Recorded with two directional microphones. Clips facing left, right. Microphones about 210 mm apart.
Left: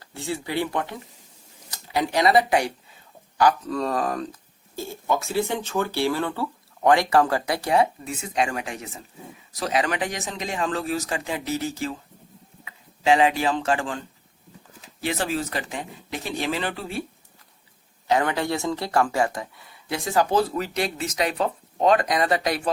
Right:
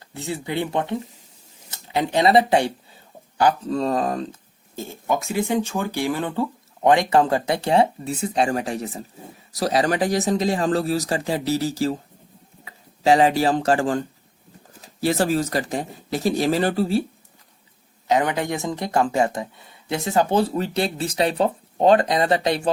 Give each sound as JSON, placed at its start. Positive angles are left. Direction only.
{"t": 0.0, "sound": "speech", "side_deg": -20}
{"t": 18.1, "sound": "speech", "side_deg": -20}